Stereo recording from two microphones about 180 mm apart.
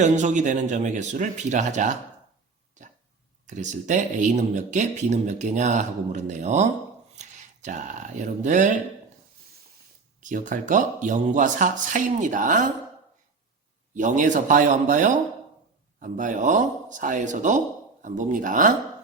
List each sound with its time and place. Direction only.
0.0 s speech: 40° right (ahead or behind)
3.4 s speech: 40° right (ahead or behind)
10.2 s speech: 45° right (ahead or behind)
13.9 s speech: 45° right (ahead or behind)